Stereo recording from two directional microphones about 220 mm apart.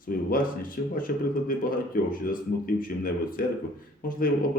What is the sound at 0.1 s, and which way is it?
Speech, 40° left (ahead or behind).